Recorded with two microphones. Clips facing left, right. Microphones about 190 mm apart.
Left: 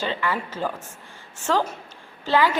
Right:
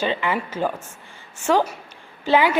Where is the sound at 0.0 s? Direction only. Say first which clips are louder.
Right 3 dB; 15° right (ahead or behind).